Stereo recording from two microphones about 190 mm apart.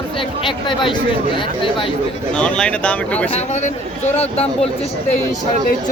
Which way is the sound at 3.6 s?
35° left (ahead or behind).